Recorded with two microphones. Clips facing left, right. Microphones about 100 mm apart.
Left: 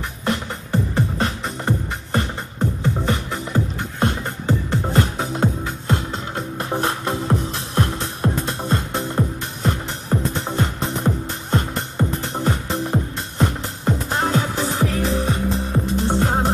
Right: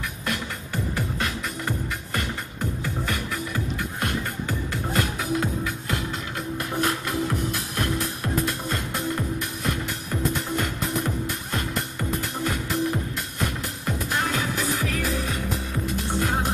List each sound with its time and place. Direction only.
0.2 s music: 30° left (ahead or behind)